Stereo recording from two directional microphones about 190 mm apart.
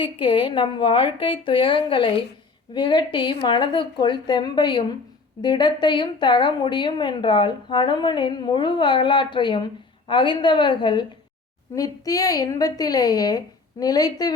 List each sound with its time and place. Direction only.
0.0 s speech: 25° left (ahead or behind)